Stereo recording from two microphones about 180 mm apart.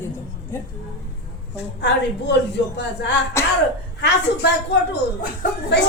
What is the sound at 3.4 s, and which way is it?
Speech, 15° left (ahead or behind).